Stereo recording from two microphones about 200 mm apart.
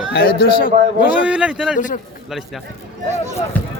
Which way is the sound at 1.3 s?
5° right (ahead or behind).